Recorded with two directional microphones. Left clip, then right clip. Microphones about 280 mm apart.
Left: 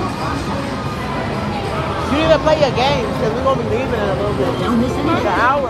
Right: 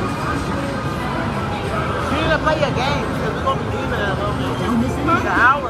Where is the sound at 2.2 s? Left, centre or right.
Centre.